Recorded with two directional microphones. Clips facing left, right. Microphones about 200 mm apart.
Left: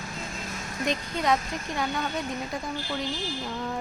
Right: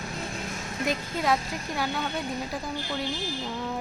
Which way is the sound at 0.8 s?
5° right (ahead or behind).